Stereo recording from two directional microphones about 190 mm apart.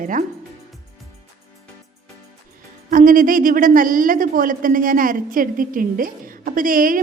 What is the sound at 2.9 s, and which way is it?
A woman's voice, 45° right (ahead or behind).